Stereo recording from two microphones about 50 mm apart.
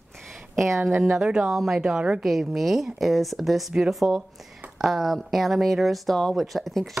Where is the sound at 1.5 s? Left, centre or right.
Centre.